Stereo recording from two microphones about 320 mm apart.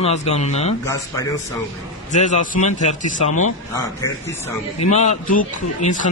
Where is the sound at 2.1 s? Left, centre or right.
Left.